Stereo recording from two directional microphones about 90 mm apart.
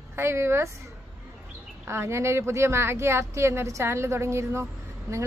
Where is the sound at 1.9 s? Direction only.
30° right (ahead or behind).